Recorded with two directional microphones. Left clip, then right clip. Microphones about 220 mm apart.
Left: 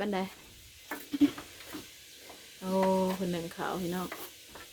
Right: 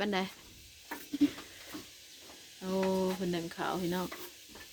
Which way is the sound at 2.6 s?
Centre (ahead or behind).